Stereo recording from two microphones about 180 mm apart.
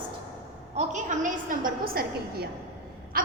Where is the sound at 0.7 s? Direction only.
45° right (ahead or behind).